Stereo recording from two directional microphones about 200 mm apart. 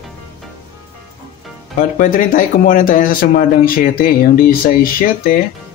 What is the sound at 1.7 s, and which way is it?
Speech, 40° left (ahead or behind).